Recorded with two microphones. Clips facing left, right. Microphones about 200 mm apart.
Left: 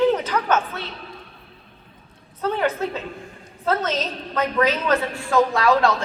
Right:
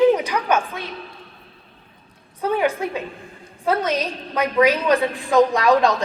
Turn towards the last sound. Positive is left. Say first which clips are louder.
# right 2 dB
turn(degrees=-15)  # may be behind; listen again after turning